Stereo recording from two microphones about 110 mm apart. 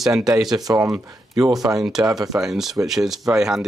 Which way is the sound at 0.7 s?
35° right (ahead or behind).